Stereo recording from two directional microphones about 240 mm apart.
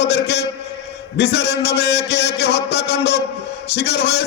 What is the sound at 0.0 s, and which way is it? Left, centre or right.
A man's voice, left.